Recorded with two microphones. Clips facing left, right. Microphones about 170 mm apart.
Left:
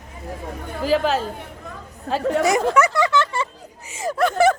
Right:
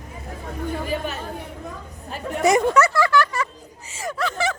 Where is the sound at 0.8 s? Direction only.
90° left.